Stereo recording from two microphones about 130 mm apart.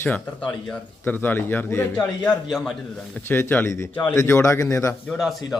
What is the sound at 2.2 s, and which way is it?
Speech, 5° left (ahead or behind).